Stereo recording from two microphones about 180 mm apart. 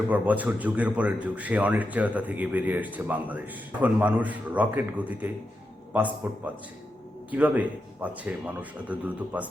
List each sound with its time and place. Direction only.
0.1 s a man's voice: 10° right (ahead or behind)